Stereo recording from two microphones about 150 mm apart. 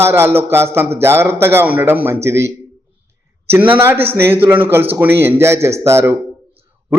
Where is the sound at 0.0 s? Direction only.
15° right (ahead or behind).